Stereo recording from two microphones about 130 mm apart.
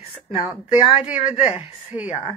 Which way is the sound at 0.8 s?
60° left (ahead or behind).